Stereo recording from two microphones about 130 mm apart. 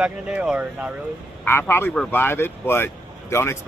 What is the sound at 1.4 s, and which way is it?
Speech, 15° left (ahead or behind).